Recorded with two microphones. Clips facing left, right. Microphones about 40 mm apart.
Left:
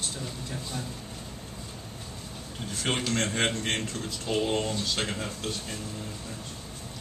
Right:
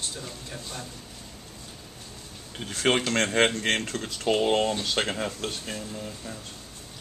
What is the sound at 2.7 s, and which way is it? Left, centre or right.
Speech, right.